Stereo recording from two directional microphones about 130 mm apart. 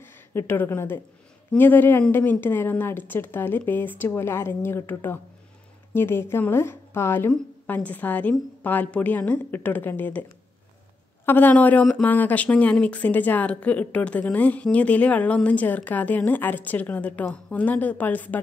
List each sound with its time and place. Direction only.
0.0 s speech: 20° left (ahead or behind)